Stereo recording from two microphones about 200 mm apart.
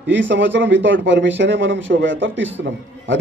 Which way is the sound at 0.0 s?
65° right (ahead or behind).